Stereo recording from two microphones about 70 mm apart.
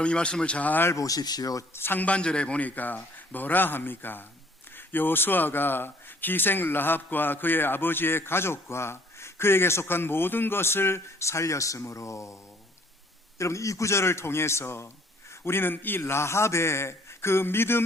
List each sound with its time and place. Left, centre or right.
0.0 s speech: centre
0.9 s speech: left
1.7 s speech: left
13.4 s speech: left